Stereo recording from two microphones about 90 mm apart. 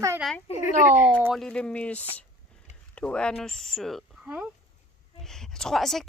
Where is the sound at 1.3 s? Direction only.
10° left (ahead or behind).